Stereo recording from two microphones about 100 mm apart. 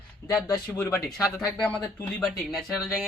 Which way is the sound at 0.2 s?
30° left (ahead or behind).